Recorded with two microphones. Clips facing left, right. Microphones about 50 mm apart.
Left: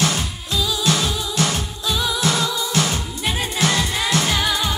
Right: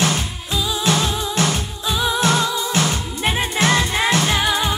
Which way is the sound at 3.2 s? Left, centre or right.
Right.